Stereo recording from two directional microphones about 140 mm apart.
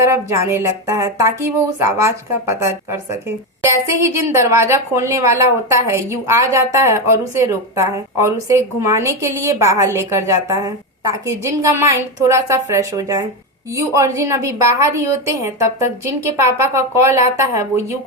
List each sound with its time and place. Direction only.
0.0 s a woman's voice: 20° right (ahead or behind)